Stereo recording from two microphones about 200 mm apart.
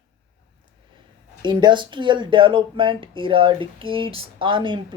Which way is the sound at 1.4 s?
20° right (ahead or behind).